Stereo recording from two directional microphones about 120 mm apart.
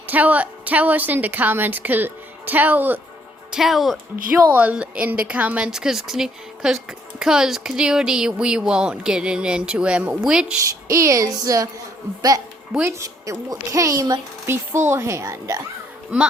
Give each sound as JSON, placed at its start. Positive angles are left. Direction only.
{"t": 0.1, "sound": "speech", "side_deg": -15}
{"t": 3.5, "sound": "speech", "side_deg": 0}
{"t": 10.8, "sound": "speech", "side_deg": -25}
{"t": 12.8, "sound": "speech", "side_deg": -25}